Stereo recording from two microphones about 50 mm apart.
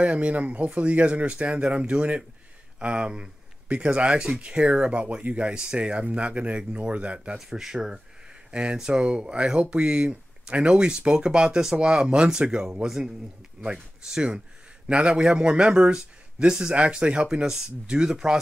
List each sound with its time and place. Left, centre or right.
0.0 s speech: right
7.3 s speech: centre